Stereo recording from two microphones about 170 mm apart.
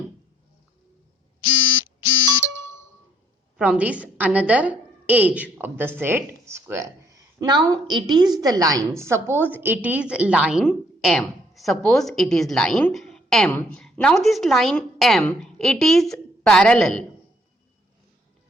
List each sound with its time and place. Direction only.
3.6 s a woman's voice: 5° right (ahead or behind)